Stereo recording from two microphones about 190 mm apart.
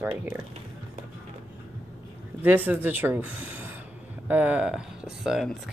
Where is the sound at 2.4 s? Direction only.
10° right (ahead or behind).